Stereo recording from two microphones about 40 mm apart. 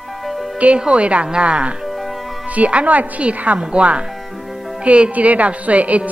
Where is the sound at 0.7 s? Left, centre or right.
Right.